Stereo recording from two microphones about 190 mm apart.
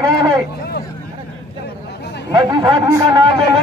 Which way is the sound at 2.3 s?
20° right (ahead or behind).